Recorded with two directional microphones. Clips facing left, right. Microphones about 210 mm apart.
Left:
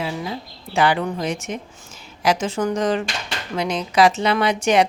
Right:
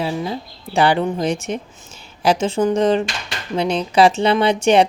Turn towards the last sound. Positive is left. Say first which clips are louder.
# right 3 dB
turn(degrees=-30)  # may be behind; listen again after turning